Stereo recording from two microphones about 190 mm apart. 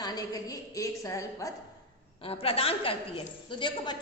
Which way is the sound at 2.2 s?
30° left (ahead or behind).